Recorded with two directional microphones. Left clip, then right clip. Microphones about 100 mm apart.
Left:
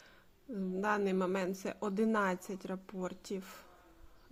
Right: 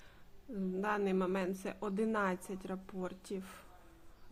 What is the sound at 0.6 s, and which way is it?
A woman's voice, 30° left (ahead or behind).